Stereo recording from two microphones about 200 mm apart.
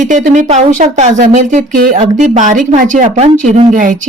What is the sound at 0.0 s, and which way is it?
Speech, 40° right (ahead or behind).